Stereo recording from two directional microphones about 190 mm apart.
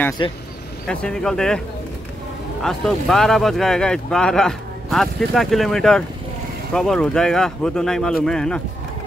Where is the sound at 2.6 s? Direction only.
5° left (ahead or behind).